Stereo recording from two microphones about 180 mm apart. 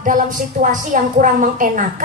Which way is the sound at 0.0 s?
45° right (ahead or behind).